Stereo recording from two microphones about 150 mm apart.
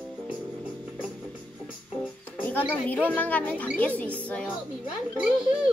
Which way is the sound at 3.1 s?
10° left (ahead or behind).